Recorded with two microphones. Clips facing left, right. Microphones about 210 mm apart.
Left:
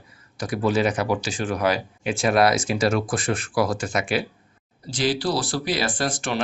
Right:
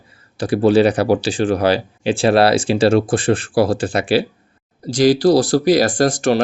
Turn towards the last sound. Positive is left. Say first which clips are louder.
# right 10 dB
turn(degrees=-40)  # may be behind; listen again after turning